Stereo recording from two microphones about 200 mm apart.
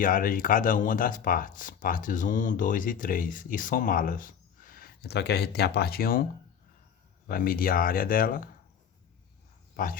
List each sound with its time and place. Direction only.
0.0 s speech: 45° left (ahead or behind)
7.3 s speech: 45° left (ahead or behind)
9.7 s speech: 45° left (ahead or behind)